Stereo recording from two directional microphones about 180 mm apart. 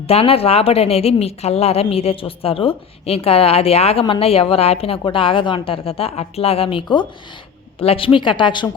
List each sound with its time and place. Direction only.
0.1 s a woman's voice: 35° left (ahead or behind)